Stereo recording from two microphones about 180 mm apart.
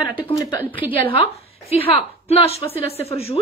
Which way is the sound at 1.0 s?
30° left (ahead or behind).